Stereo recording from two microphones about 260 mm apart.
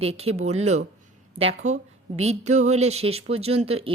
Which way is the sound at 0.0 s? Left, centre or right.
Right.